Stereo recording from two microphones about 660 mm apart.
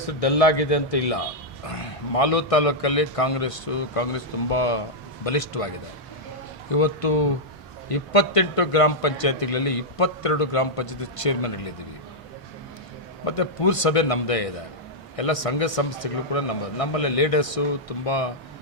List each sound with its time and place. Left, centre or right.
0.0 s a man's voice: left
13.2 s a man's voice: left